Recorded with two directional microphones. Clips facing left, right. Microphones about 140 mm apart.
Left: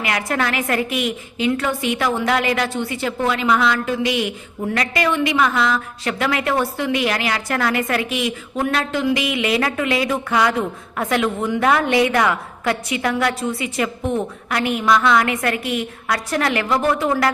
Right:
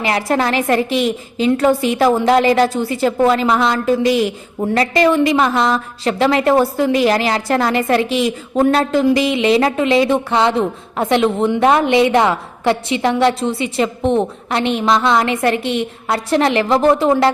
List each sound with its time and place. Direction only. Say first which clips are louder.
0.0 s a woman's voice: right 5 dB; 30° right (ahead or behind)